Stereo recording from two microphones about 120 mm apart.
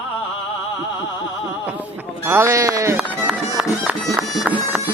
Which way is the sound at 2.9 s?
5° right (ahead or behind).